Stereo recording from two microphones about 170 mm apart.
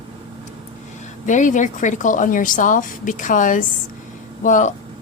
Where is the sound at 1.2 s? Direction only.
50° left (ahead or behind).